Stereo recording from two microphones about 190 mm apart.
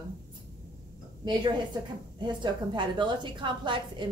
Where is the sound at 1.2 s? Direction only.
25° right (ahead or behind).